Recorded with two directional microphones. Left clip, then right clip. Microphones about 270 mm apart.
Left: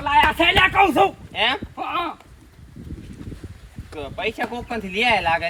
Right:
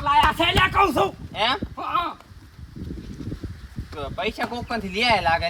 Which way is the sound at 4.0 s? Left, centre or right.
Right.